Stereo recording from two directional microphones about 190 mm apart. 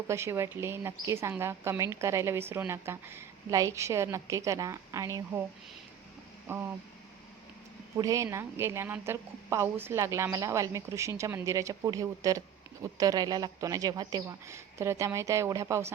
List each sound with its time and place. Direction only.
0.1 s a woman's voice: 15° right (ahead or behind)
6.5 s a woman's voice: 10° right (ahead or behind)
7.9 s a woman's voice: 15° right (ahead or behind)